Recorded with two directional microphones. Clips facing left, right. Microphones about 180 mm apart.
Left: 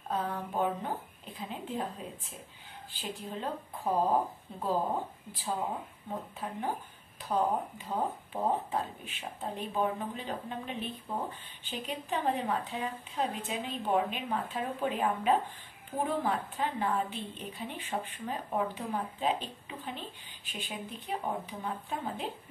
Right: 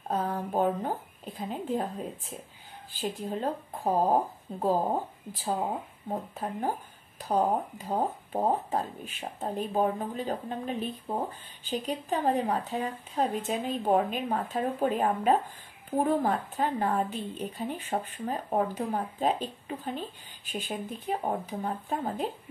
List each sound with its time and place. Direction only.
0.1 s speech: 40° right (ahead or behind)